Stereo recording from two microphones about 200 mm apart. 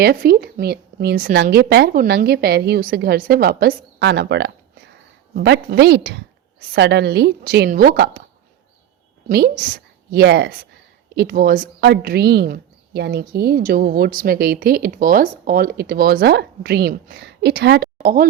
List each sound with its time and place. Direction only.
0.0 s a woman's voice: 50° right (ahead or behind)
10.1 s a woman's voice: 55° right (ahead or behind)